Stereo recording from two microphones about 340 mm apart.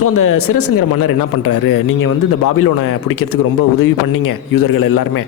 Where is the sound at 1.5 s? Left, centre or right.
Left.